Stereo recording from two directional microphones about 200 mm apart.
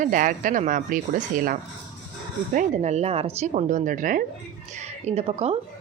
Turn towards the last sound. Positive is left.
turn(degrees=-30)  # may be behind; listen again after turning